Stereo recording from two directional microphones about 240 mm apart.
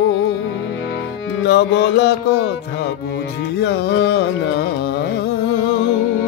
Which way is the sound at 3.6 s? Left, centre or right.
Left.